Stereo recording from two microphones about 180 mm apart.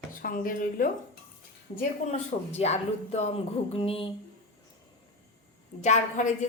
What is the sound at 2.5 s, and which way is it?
Speech, 35° left (ahead or behind).